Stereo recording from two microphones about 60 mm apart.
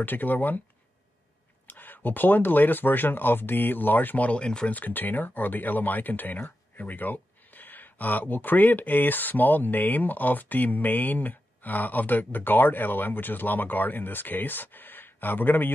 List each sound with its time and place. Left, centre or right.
0.0 s speech: left
1.7 s speech: left
4.7 s speech: left